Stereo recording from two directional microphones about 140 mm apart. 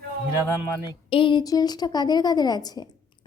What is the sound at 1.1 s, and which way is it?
A woman's voice, 35° left (ahead or behind).